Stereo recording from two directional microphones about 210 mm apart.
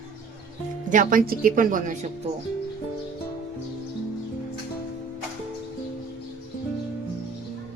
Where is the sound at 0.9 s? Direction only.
40° right (ahead or behind).